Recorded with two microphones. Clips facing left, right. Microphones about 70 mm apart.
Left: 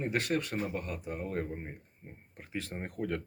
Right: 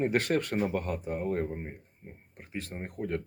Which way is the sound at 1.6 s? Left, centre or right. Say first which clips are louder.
Right 3 dB; centre.